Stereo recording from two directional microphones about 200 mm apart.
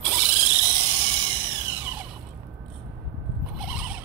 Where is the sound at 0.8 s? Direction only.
25° right (ahead or behind).